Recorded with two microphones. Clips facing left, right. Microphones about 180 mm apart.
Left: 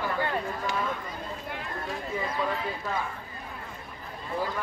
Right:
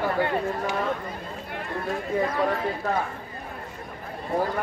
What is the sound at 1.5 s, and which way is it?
Speech, 50° right (ahead or behind).